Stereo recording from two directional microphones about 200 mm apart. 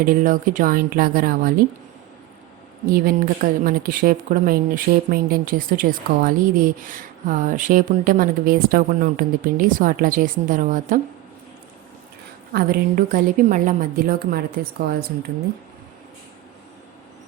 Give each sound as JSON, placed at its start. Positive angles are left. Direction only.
{"t": 0.0, "sound": "a woman's voice", "side_deg": -45}
{"t": 2.9, "sound": "a woman's voice", "side_deg": -45}
{"t": 12.5, "sound": "a woman's voice", "side_deg": -45}